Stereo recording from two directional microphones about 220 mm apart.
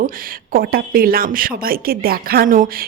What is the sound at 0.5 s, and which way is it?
Speech, 45° right (ahead or behind).